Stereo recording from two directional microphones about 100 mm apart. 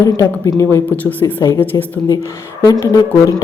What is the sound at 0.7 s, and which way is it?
A woman's voice, 20° left (ahead or behind).